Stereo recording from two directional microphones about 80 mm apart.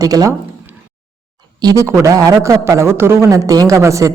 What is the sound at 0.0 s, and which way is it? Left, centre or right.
Speech, right.